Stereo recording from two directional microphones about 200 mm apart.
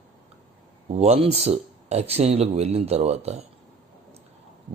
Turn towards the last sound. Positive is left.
turn(degrees=-35)  # may be behind; listen again after turning